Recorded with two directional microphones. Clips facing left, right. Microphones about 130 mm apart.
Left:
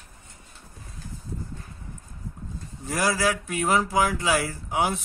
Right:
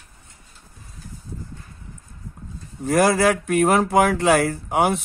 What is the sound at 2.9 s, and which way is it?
Speech, 55° right (ahead or behind).